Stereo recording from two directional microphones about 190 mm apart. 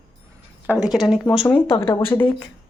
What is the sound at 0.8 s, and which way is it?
Speech, 5° right (ahead or behind).